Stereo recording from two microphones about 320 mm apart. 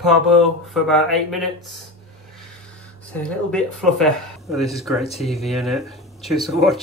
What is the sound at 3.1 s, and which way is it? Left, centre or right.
Speech, centre.